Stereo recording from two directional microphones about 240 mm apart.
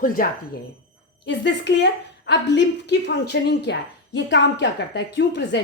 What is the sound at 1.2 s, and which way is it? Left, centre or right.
Speech, left.